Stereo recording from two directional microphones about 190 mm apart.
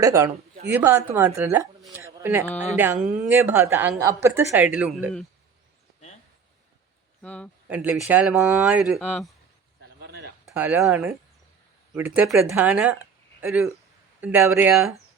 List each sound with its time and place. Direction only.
0.0 s a woman's voice: 15° right (ahead or behind)
7.2 s speech: 5° left (ahead or behind)
7.7 s a woman's voice: 10° right (ahead or behind)
9.8 s a sound: 60° right (ahead or behind)
10.4 s a woman's voice: 5° right (ahead or behind)
14.7 s speech: 5° right (ahead or behind)